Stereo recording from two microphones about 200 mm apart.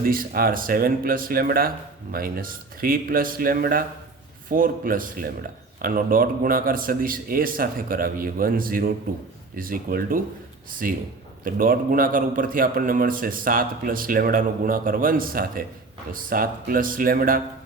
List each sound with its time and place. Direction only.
0.0 s speech: 45° right (ahead or behind)